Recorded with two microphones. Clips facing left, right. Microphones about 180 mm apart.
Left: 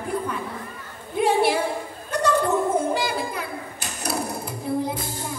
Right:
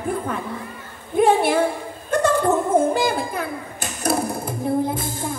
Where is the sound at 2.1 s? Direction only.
50° right (ahead or behind).